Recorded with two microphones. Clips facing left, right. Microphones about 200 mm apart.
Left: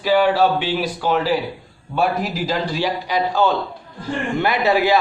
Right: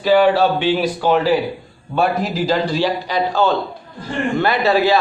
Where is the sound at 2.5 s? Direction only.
10° left (ahead or behind).